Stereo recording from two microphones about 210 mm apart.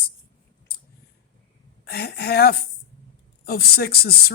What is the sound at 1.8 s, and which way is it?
Speech, 50° left (ahead or behind).